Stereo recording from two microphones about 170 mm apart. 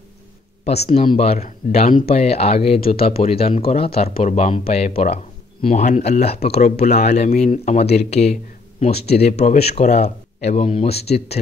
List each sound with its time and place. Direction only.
1.0 s speech: 35° left (ahead or behind)